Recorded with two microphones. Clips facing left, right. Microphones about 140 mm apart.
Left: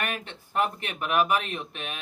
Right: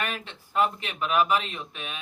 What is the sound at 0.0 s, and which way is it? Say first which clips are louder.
Speech: even; 55° left (ahead or behind).